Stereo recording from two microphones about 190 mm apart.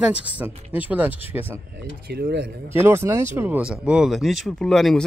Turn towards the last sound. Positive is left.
turn(degrees=0)  # may be behind; listen again after turning